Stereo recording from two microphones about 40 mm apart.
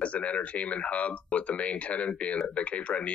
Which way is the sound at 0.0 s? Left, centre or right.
Left.